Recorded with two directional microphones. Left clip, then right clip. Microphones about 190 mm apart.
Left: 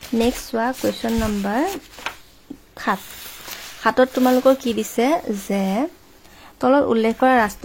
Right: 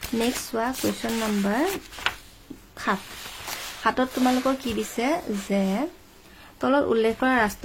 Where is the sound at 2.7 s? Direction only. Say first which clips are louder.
Left 4 dB; 30° left (ahead or behind).